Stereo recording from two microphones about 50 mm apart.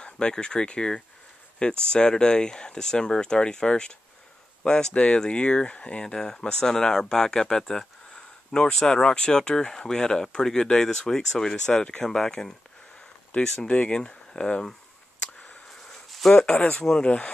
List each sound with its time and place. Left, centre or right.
0.0 s speech: centre
13.7 s speech: left
15.9 s a sound: centre
16.7 s speech: centre
17.0 s speech: left